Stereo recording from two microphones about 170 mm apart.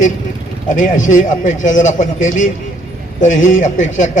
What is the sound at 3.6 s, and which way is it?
Speech, 45° left (ahead or behind).